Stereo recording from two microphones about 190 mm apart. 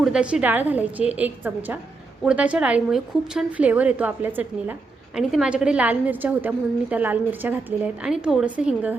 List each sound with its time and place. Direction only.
0.0 s a woman's voice: 5° right (ahead or behind)